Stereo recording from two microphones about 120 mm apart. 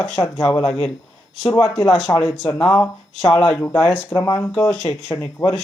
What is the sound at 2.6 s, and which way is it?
Speech, 5° left (ahead or behind).